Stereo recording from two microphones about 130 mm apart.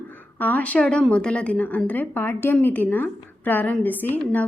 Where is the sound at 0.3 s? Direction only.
10° left (ahead or behind).